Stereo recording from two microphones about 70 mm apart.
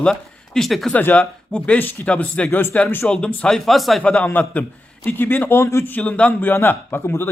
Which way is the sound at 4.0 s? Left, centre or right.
Centre.